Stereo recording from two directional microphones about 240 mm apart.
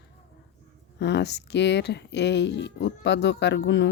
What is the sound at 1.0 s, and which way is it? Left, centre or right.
Speech, left.